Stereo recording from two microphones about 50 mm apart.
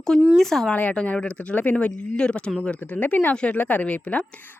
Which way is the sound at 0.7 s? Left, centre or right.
Left.